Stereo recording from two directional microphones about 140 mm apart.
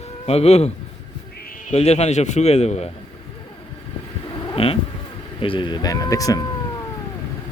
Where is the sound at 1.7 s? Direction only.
50° left (ahead or behind).